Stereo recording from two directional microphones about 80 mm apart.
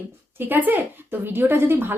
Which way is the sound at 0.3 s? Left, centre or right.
Right.